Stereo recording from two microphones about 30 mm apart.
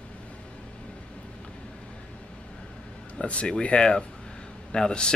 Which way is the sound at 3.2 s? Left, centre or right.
Left.